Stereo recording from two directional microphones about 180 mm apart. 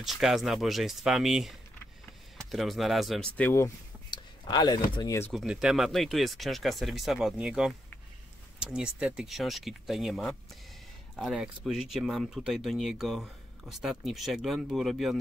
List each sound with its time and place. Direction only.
0.0 s speech: centre (ahead or behind)
3.3 s speech: 15° left (ahead or behind)
4.1 s a sound: 25° left (ahead or behind)
4.9 s speech: 20° left (ahead or behind)
5.3 s speech: centre (ahead or behind)